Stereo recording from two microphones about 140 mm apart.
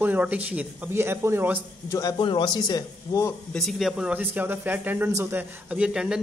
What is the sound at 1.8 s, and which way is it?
Speech, 20° left (ahead or behind).